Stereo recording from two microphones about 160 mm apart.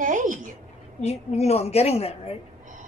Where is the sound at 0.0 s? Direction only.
55° right (ahead or behind).